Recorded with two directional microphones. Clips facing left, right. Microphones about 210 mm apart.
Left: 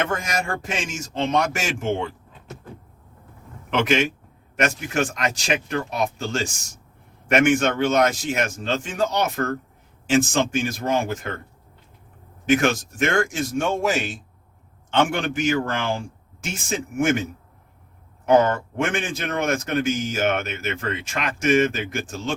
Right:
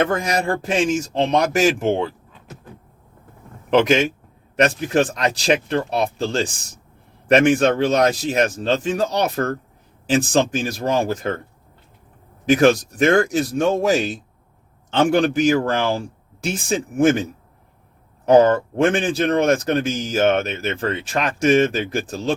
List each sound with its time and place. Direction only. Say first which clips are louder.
0.0 s a man's voice: right 5 dB; 35° right (ahead or behind)
3.7 s a man's voice: right 5 dB; 35° right (ahead or behind)
12.5 s a man's voice: right 5 dB; 35° right (ahead or behind)
14.9 s a man's voice: right 5 dB; 35° right (ahead or behind)
18.3 s a man's voice: right 5 dB; 35° right (ahead or behind)